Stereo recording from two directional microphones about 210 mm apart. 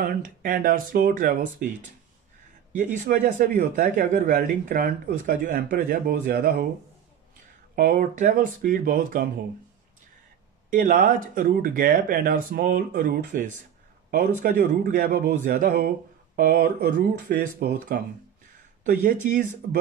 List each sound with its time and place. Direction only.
0.0 s speech: 40° right (ahead or behind)
2.8 s speech: 35° right (ahead or behind)
7.7 s speech: 40° right (ahead or behind)
10.7 s speech: 40° right (ahead or behind)